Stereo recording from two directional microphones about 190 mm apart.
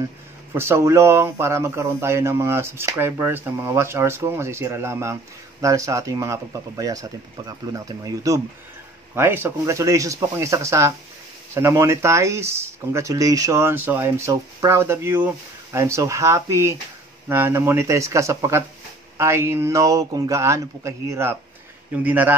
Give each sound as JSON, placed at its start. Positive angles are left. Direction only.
{"t": 0.6, "sound": "speech", "side_deg": -15}